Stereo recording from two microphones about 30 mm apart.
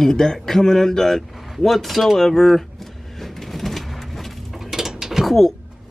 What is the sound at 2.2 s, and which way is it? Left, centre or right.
Speech, centre.